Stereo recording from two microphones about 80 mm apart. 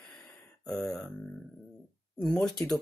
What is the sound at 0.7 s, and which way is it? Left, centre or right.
Speech, centre.